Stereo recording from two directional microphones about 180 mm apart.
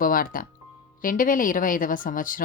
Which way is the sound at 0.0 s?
50° left (ahead or behind).